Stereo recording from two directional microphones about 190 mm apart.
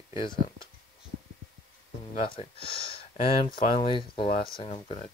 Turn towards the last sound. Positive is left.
turn(degrees=30)  # may be behind; listen again after turning